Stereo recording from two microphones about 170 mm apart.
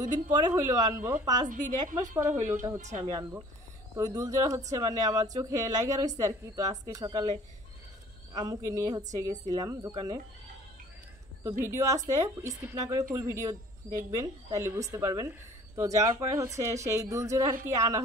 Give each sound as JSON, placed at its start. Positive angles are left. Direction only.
{"t": 0.1, "sound": "a woman's voice", "side_deg": -25}
{"t": 2.3, "sound": "speech", "side_deg": -45}
{"t": 3.1, "sound": "a woman's voice", "side_deg": -20}
{"t": 8.4, "sound": "a woman's voice", "side_deg": -20}
{"t": 11.6, "sound": "a woman's voice", "side_deg": -20}